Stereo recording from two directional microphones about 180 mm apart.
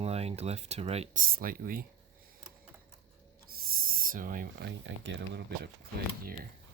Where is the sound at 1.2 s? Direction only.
50° right (ahead or behind).